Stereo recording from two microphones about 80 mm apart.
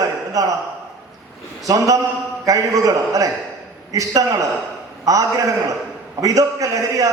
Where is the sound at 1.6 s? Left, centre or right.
Right.